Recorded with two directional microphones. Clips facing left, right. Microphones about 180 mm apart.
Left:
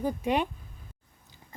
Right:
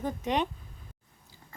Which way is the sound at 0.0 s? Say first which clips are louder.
Left 2 dB; 10° left (ahead or behind).